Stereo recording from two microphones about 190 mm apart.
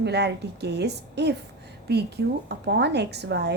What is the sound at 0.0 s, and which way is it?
A woman's voice, 60° right (ahead or behind).